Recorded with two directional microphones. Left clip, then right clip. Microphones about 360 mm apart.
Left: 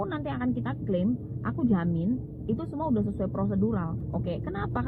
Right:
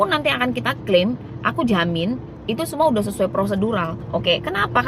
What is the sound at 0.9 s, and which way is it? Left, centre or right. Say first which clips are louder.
A woman's voice: right 12 dB; right.